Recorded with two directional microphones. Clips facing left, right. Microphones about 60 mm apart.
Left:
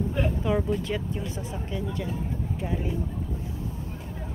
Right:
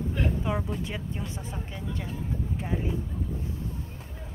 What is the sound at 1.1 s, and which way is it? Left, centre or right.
Speech, right.